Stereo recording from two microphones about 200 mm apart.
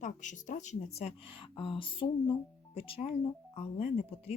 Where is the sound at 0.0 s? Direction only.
40° left (ahead or behind).